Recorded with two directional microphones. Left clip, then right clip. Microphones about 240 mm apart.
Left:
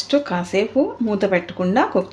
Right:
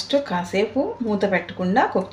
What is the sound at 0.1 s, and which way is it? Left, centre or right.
Speech, left.